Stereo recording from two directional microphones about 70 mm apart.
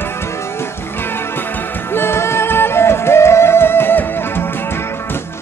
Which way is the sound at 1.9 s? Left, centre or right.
Left.